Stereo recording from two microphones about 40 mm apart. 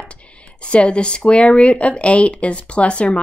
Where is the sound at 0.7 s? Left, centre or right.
Left.